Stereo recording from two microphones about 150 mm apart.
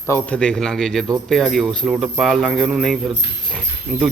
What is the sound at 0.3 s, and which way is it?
A man's voice, 5° left (ahead or behind).